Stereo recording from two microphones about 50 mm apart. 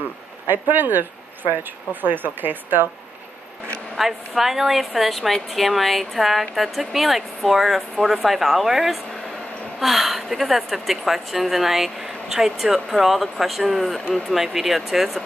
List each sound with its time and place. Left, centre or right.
0.5 s speech: right
3.9 s a woman's voice: centre